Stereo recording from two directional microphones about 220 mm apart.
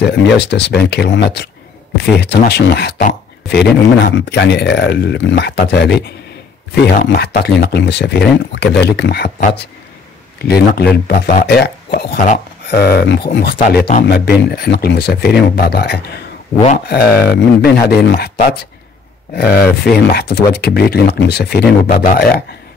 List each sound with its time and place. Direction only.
0.0 s speech: 50° left (ahead or behind)
10.4 s speech: 45° left (ahead or behind)